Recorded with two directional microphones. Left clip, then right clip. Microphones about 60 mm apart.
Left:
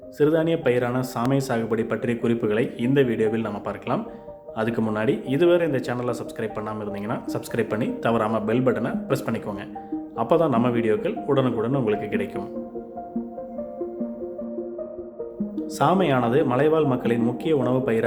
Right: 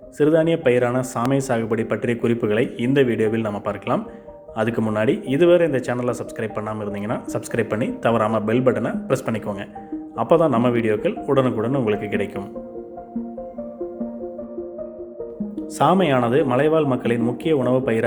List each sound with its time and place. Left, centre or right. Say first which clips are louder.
0.2 s a man's voice: right 3 dB; right
4.8 s speech: right 4 dB; right
5.0 s speech: right 3 dB; right
11.9 s a man's voice: right 2 dB; right
15.5 s speech: right 3 dB; right